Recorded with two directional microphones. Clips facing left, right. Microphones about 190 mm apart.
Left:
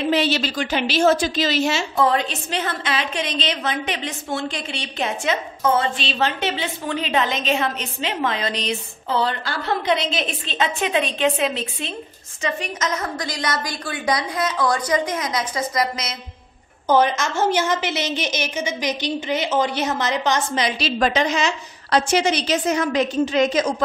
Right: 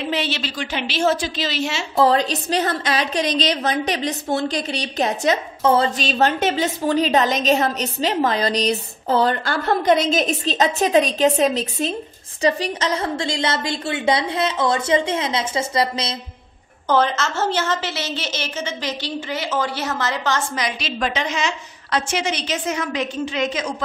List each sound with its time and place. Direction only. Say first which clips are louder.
0.1 s a woman's voice: left 4 dB; 40° left (ahead or behind)
2.0 s a woman's voice: right 6 dB; 35° right (ahead or behind)
16.9 s a woman's voice: left 1 dB; 15° left (ahead or behind); by 23.6 s 40° left (ahead or behind)